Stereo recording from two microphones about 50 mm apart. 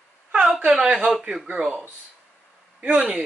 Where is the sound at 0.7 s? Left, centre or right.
Centre.